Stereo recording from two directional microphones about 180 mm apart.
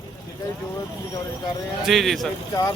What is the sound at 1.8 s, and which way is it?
Speech, centre (ahead or behind).